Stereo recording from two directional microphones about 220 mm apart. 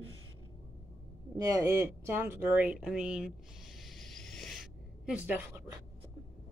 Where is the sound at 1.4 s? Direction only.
15° right (ahead or behind).